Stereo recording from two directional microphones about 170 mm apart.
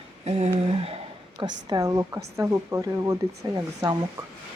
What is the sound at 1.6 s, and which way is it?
A woman's voice, 20° right (ahead or behind).